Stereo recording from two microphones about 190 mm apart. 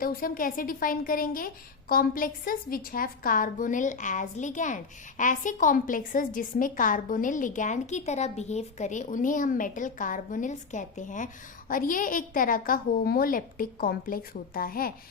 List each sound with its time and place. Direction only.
0.0 s a woman's voice: 50° left (ahead or behind)